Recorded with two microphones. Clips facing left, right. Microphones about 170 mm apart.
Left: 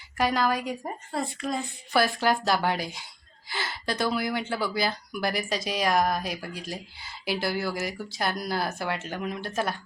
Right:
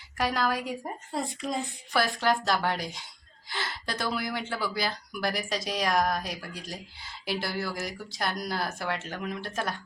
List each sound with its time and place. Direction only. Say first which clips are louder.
0.2 s speech: left 3 dB; centre (ahead or behind)
1.1 s speech: left 2 dB; 20° right (ahead or behind)
1.9 s speech: left 2 dB; 5° left (ahead or behind)